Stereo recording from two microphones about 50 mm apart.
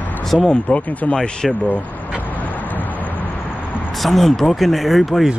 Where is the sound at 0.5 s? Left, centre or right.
Left.